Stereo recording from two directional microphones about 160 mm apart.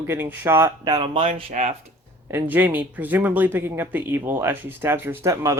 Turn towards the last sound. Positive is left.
turn(degrees=-20)  # may be behind; listen again after turning